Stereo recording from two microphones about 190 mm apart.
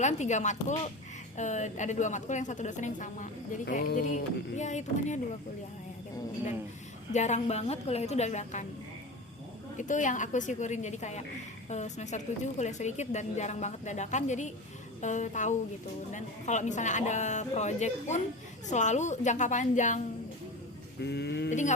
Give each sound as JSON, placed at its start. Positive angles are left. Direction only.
{"t": 0.0, "sound": "a woman's voice", "side_deg": 40}
{"t": 7.1, "sound": "a woman's voice", "side_deg": 40}
{"t": 9.7, "sound": "a woman's voice", "side_deg": 40}
{"t": 21.0, "sound": "a sound", "side_deg": 60}